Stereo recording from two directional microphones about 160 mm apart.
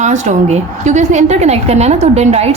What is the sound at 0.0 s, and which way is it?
A woman's voice, 45° right (ahead or behind).